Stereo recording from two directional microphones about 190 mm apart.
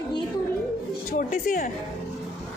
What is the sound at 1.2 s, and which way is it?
Speech, 45° left (ahead or behind).